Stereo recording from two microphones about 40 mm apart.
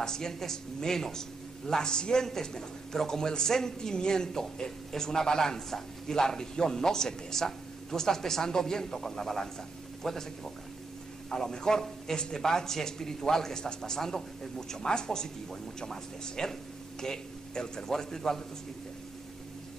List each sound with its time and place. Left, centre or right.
0.0 s speech: centre